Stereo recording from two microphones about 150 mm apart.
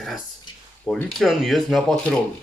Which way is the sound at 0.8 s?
5° left (ahead or behind).